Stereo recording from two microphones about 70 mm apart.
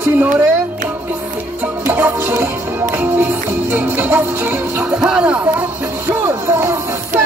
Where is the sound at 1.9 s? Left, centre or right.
Right.